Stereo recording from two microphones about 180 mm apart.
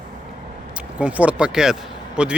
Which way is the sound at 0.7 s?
5° right (ahead or behind).